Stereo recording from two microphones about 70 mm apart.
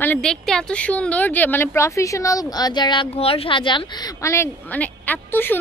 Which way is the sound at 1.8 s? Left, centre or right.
Left.